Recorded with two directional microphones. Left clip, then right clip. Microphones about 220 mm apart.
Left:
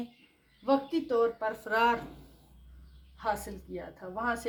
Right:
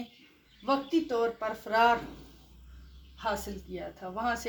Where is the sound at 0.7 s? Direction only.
30° left (ahead or behind).